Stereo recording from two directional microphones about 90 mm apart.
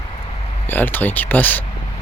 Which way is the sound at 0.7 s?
20° left (ahead or behind).